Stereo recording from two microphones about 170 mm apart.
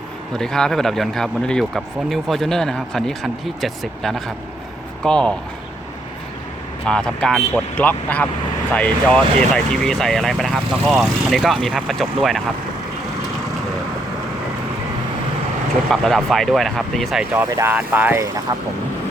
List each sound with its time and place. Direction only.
0.3 s speech: 5° left (ahead or behind)
6.8 s speech: 5° left (ahead or behind)
15.9 s speech: centre (ahead or behind)
17.3 s speech: 15° right (ahead or behind)